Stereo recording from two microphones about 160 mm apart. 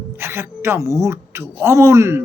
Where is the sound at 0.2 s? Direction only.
15° right (ahead or behind).